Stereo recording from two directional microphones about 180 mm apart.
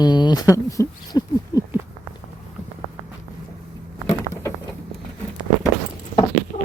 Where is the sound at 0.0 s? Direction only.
25° left (ahead or behind).